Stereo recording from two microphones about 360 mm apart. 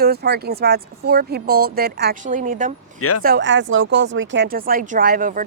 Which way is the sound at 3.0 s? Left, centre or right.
Left.